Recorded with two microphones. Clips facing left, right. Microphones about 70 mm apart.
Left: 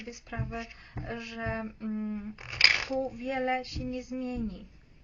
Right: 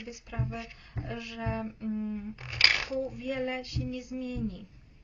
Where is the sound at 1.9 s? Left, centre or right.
Left.